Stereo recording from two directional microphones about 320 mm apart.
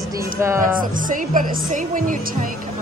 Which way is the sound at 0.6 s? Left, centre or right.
Right.